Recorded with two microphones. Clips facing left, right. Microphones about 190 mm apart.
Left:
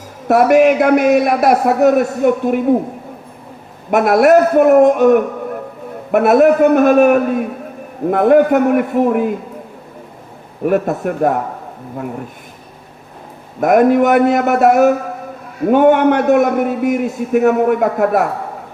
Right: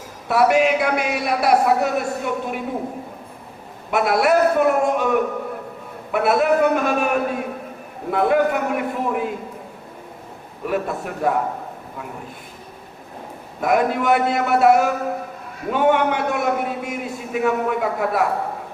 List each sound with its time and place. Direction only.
0.3 s a man's voice: 50° left (ahead or behind)
3.9 s a man's voice: 45° left (ahead or behind)
10.6 s a man's voice: 50° left (ahead or behind)
13.6 s a man's voice: 50° left (ahead or behind)